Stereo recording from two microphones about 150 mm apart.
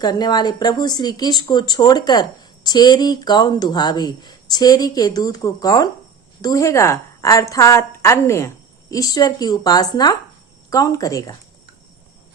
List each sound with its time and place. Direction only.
0.0 s a woman's voice: 25° left (ahead or behind)